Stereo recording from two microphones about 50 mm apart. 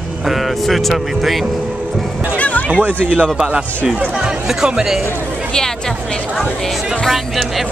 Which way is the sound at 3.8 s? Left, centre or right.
Centre.